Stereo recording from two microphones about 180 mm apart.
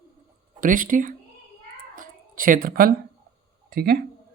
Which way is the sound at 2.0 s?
50° right (ahead or behind).